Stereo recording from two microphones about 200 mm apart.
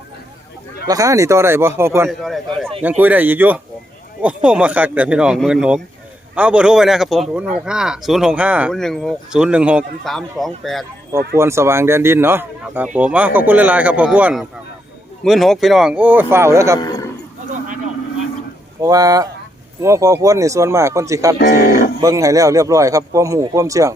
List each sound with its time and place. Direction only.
0.9 s speech: 15° right (ahead or behind)
2.0 s speech: centre (ahead or behind)
3.0 s speech: 10° right (ahead or behind)
11.3 s speech: 15° right (ahead or behind)
16.8 s a sound: 20° left (ahead or behind)
18.8 s speech: 15° right (ahead or behind)
21.3 s speech: 55° left (ahead or behind)
22.0 s speech: 15° right (ahead or behind)